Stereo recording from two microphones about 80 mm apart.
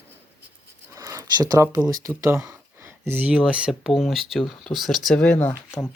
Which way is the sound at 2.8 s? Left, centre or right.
Right.